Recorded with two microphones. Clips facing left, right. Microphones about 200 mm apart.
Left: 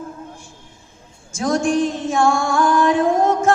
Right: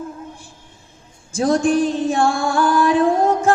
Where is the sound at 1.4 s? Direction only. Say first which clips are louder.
Right 2 dB; 35° right (ahead or behind).